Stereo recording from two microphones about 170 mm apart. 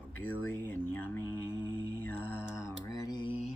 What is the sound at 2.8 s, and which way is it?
Mantra, 20° left (ahead or behind).